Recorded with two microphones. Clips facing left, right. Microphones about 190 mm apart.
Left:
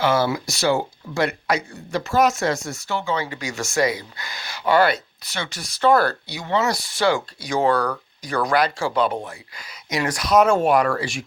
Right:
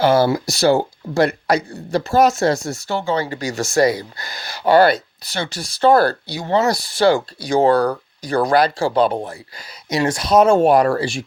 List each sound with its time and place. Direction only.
0.0 s speech: 35° right (ahead or behind)